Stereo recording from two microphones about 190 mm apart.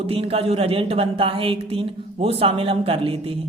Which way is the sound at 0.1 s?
30° right (ahead or behind).